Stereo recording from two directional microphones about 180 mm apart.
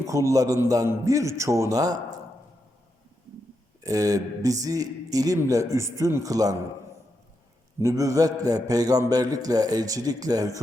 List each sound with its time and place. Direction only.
0.0 s a man's voice: 15° right (ahead or behind)
3.8 s a man's voice: 20° right (ahead or behind)
7.8 s a man's voice: 15° right (ahead or behind)